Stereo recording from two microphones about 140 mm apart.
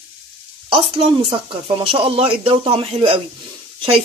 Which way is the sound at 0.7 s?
40° right (ahead or behind).